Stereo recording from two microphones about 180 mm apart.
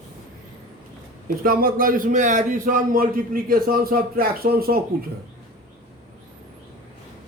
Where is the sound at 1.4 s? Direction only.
50° right (ahead or behind).